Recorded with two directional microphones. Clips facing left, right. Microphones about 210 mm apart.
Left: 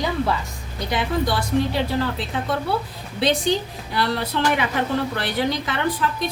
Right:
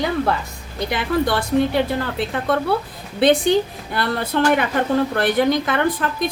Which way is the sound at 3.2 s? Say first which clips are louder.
Right 6 dB; 55° right (ahead or behind).